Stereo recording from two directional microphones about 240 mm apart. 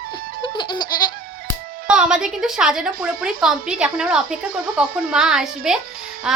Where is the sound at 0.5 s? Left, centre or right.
Centre.